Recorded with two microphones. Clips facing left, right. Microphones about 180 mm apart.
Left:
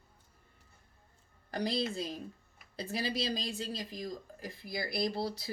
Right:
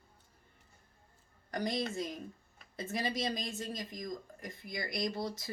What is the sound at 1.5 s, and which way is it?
A woman's voice, 30° left (ahead or behind).